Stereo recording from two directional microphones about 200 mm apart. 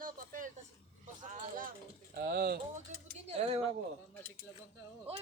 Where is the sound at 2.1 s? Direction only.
50° right (ahead or behind).